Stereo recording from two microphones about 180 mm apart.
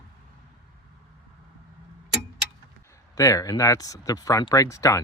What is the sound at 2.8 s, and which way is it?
Speech, 15° left (ahead or behind).